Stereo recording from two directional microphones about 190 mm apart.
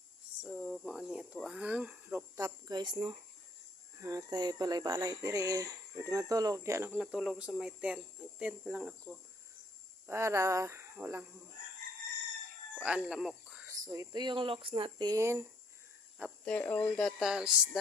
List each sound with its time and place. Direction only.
0.4 s speech: centre (ahead or behind)
12.8 s speech: 5° right (ahead or behind)
13.7 s speech: 20° right (ahead or behind)
16.5 s speech: 10° left (ahead or behind)